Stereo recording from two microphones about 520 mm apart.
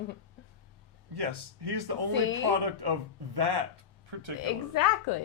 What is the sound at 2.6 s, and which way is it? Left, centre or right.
Speech, right.